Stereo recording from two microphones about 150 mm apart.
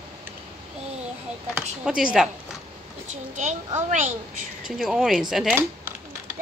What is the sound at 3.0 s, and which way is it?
A child's voice, 50° right (ahead or behind).